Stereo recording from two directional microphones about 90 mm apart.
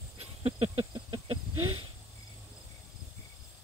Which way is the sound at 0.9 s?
75° right (ahead or behind).